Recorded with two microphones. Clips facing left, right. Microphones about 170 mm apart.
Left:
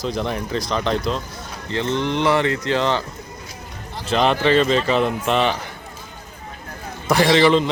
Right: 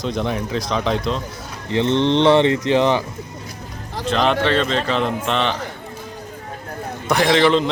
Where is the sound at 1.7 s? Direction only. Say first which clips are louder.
Right 5 dB; 20° right (ahead or behind).